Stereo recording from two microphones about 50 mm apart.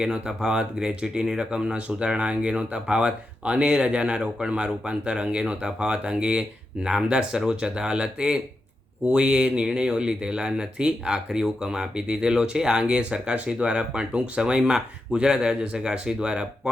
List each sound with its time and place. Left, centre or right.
0.0 s speech: centre